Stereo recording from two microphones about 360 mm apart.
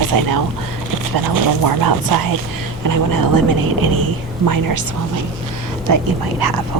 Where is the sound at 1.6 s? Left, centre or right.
Right.